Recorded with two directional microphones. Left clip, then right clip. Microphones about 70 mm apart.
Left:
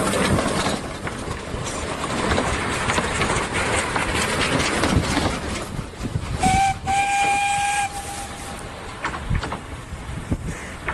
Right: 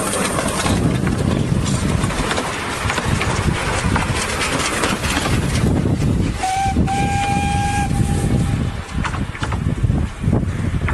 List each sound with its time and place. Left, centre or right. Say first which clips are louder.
0.0 s vehicle: right 1 dB; right
2.9 s a sound: right 1 dB; right
3.9 s vehicle: right 1 dB; right
6.5 s train: left 1 dB; centre